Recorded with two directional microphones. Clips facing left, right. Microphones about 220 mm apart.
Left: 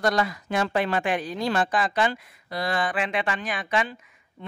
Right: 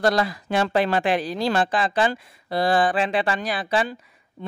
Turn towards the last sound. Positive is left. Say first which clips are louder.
# right 5 dB
turn(degrees=-35)  # may be behind; listen again after turning